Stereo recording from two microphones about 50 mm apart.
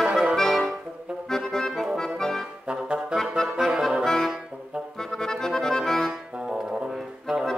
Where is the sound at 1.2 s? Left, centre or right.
Centre.